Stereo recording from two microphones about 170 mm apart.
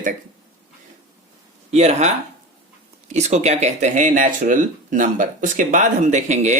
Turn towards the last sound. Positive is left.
turn(degrees=-45)  # may be behind; listen again after turning